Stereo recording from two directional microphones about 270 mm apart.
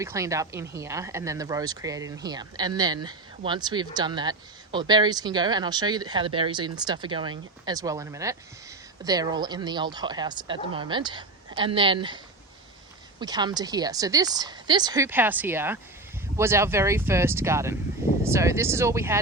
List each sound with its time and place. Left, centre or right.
0.0 s speech: centre